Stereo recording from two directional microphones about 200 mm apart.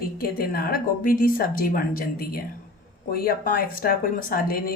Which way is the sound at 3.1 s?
50° left (ahead or behind).